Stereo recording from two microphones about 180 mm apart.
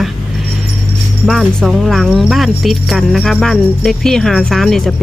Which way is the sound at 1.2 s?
Centre (ahead or behind).